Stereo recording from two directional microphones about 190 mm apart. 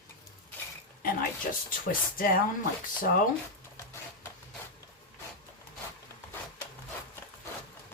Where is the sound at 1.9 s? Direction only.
45° left (ahead or behind).